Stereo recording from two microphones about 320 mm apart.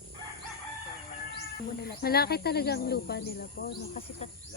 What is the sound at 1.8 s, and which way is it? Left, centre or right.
Speech, left.